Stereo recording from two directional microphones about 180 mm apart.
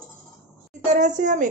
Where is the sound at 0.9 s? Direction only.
45° right (ahead or behind).